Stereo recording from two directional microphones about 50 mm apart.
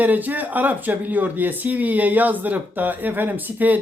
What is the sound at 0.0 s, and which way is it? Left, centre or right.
Speech, right.